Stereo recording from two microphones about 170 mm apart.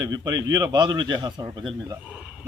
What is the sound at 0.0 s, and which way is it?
A man's voice, 25° right (ahead or behind).